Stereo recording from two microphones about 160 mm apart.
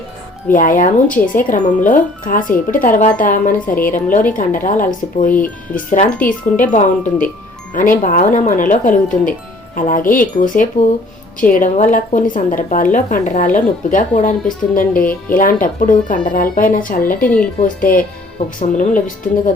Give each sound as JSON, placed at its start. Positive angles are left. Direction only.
{"t": 0.5, "sound": "a woman's voice", "side_deg": 55}
{"t": 17.2, "sound": "speech", "side_deg": 5}
{"t": 17.6, "sound": "a woman's voice", "side_deg": 60}